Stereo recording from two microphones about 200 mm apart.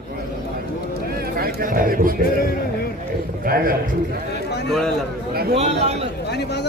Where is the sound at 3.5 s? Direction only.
45° right (ahead or behind).